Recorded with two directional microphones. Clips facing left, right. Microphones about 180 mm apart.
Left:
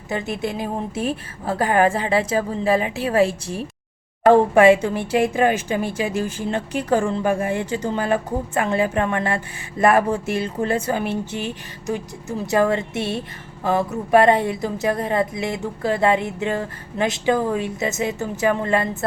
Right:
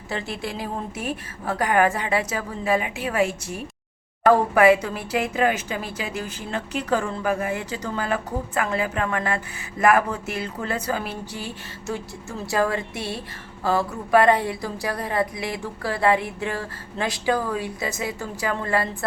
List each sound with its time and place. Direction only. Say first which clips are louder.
0.1 s a woman's voice: left 5 dB; 20° left (ahead or behind)